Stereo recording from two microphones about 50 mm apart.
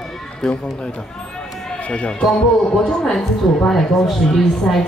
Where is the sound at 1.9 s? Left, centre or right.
Left.